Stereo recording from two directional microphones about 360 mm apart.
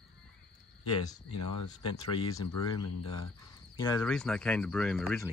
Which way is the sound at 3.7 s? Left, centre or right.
Centre.